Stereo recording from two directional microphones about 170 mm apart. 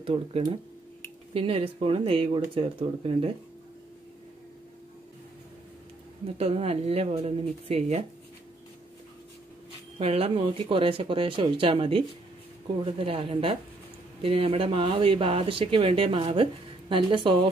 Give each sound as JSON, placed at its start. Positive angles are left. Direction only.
{"t": 0.0, "sound": "speech", "side_deg": -35}
{"t": 6.2, "sound": "speech", "side_deg": -35}
{"t": 9.9, "sound": "a woman's voice", "side_deg": -35}